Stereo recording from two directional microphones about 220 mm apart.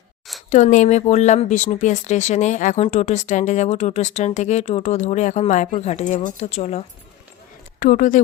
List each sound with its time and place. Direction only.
0.5 s speech: 35° left (ahead or behind)